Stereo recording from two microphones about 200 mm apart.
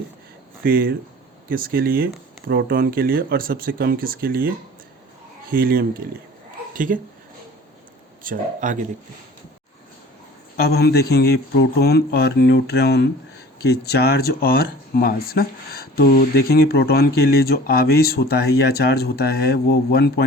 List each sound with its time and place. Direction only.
0.6 s speech: 45° right (ahead or behind)
8.2 s speech: 40° right (ahead or behind)
10.7 s speech: 55° left (ahead or behind)